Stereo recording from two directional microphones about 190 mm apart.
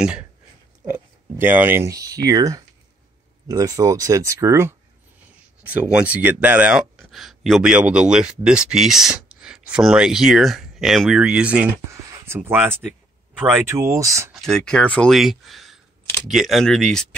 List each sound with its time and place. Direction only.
0.8 s speech: 10° right (ahead or behind)
14.3 s speech: centre (ahead or behind)